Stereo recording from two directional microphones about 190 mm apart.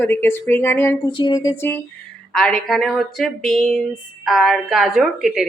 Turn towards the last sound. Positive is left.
turn(degrees=0)  # may be behind; listen again after turning